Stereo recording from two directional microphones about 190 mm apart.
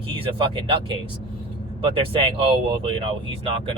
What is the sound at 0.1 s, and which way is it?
Speech, 25° right (ahead or behind).